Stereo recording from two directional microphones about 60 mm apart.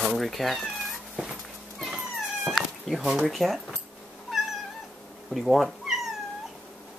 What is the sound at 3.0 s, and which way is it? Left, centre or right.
Speech, centre.